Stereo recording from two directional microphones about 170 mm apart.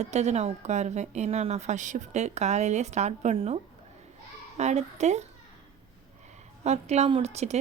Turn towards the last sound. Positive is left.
turn(degrees=-40)  # may be behind; listen again after turning